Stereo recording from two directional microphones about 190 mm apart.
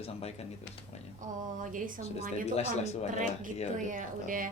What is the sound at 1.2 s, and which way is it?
Speech, 40° right (ahead or behind).